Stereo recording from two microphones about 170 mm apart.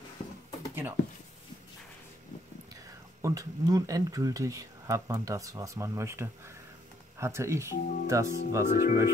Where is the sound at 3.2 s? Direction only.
20° right (ahead or behind).